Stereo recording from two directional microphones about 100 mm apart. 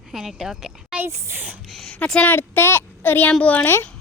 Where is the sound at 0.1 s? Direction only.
5° right (ahead or behind).